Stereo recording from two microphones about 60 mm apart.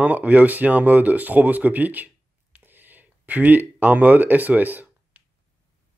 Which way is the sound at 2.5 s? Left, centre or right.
Right.